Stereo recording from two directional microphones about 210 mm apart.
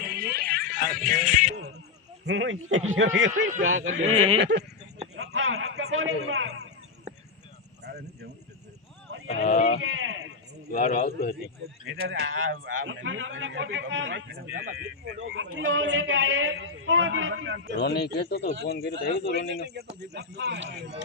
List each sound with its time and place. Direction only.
0.0 s a sound: 45° right (ahead or behind)
2.2 s a man's voice: 65° right (ahead or behind)
3.4 s speech: 35° right (ahead or behind)
3.7 s a man's voice: 70° right (ahead or behind)
4.4 s speech: 55° right (ahead or behind)
5.1 s a sound: 80° right
5.6 s a man's voice: 85° right
7.9 s a sound: 50° right (ahead or behind)
9.2 s speech: 35° left (ahead or behind)
9.8 s a sound: 70° right (ahead or behind)
10.7 s a man's voice: 40° left (ahead or behind)
11.9 s a man's voice: 70° right (ahead or behind)
17.7 s speech: 50° left (ahead or behind)
19.6 s speech: 50° right (ahead or behind)